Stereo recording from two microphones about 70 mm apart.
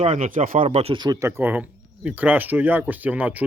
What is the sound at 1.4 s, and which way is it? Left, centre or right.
Speech, right.